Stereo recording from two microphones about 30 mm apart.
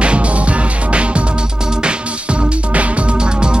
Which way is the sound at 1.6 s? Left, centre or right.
Right.